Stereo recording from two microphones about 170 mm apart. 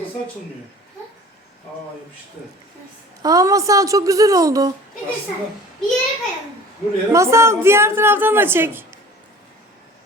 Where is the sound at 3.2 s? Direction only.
20° right (ahead or behind).